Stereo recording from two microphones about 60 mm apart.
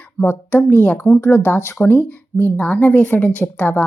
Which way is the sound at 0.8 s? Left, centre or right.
Left.